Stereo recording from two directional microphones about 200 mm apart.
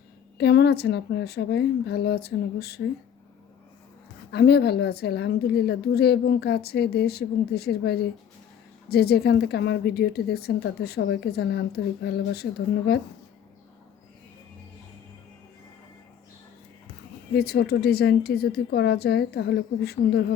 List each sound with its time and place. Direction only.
0.3 s a woman's voice: 55° left (ahead or behind)
4.3 s a woman's voice: 55° left (ahead or behind)
17.3 s a woman's voice: 55° left (ahead or behind)